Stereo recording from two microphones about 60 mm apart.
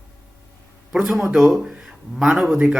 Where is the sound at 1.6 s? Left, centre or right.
Centre.